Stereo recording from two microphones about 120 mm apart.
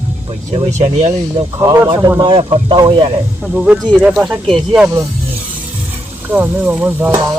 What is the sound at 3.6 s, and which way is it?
Speech, 5° right (ahead or behind).